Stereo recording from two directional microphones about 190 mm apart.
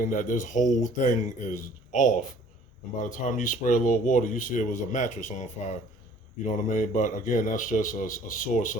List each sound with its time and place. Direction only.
0.0 s speech: 45° left (ahead or behind)